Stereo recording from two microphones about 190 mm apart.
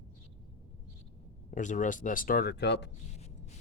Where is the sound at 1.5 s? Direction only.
40° left (ahead or behind); by 2.9 s 65° left (ahead or behind).